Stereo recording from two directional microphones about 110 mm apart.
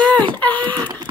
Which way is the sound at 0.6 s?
40° right (ahead or behind).